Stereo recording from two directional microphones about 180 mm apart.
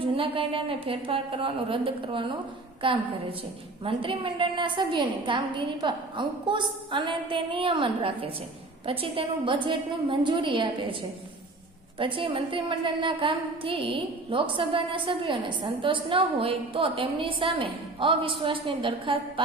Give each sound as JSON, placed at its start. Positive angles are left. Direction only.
{"t": 0.0, "sound": "a woman's voice", "side_deg": -30}
{"t": 11.9, "sound": "a woman's voice", "side_deg": -30}